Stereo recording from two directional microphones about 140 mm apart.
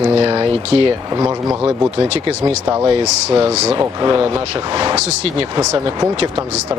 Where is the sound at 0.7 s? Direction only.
45° right (ahead or behind).